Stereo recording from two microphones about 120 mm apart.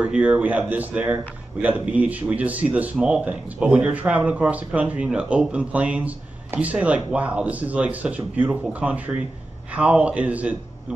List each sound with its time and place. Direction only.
0.0 s a man's voice: 10° right (ahead or behind)